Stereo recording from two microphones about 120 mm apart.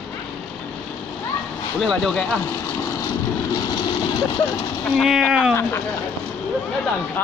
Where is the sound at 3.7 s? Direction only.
40° left (ahead or behind).